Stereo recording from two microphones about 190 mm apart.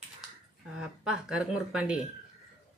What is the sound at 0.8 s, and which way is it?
Speech, 5° right (ahead or behind).